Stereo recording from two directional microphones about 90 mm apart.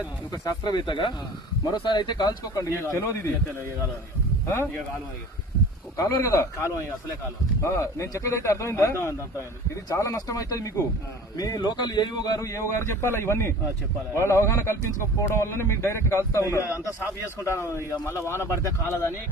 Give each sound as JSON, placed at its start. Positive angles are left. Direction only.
{"t": 0.4, "sound": "speech", "side_deg": 55}
{"t": 2.6, "sound": "speech", "side_deg": 35}
{"t": 6.0, "sound": "speech", "side_deg": 35}
{"t": 12.4, "sound": "a man's voice", "side_deg": 35}